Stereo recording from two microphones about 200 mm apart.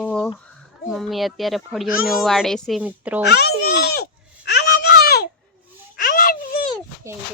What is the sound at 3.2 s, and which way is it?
Speech, 55° left (ahead or behind).